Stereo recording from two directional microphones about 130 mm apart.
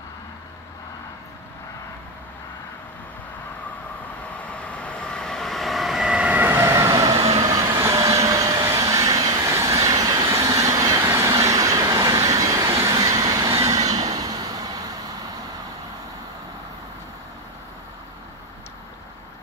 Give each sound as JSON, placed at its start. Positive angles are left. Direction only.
{"t": 4.5, "sound": "train", "side_deg": 10}
{"t": 7.4, "sound": "vehicle", "side_deg": -25}
{"t": 9.1, "sound": "train", "side_deg": -25}